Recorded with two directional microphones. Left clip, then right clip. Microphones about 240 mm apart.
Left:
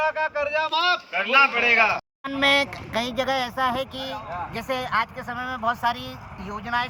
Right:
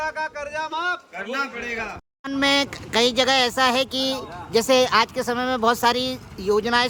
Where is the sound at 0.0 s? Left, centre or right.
Centre.